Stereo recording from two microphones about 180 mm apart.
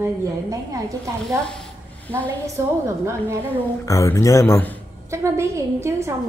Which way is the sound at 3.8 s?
15° left (ahead or behind).